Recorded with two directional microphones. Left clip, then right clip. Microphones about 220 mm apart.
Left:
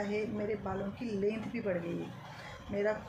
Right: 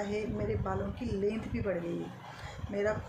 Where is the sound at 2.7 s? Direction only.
15° right (ahead or behind).